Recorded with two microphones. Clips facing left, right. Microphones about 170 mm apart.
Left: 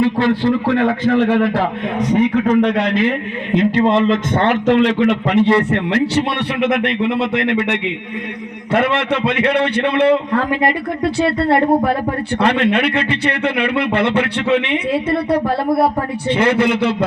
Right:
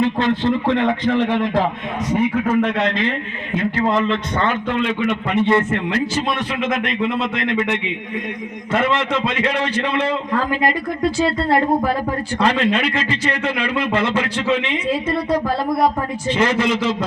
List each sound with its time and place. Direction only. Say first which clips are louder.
0.0 s a man's voice: left 3 dB; 20° right (ahead or behind)
2.8 s a man's voice: left 4 dB; 10° left (ahead or behind); by 4.1 s 30° left (ahead or behind)
4.4 s a man's voice: left 8 dB; 75° left (ahead or behind)